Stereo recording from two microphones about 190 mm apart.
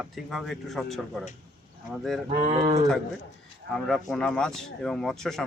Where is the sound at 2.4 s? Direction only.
35° right (ahead or behind).